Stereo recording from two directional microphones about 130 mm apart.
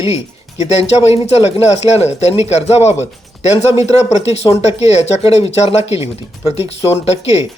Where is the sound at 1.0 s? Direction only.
50° left (ahead or behind).